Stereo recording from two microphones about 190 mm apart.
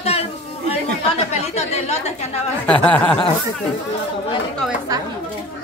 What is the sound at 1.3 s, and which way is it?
Speech, 35° left (ahead or behind).